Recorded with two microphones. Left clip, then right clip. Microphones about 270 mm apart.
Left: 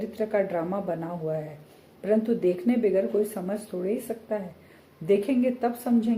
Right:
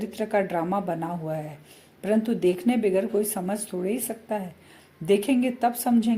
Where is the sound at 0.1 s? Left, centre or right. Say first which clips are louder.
Right 1 dB; right.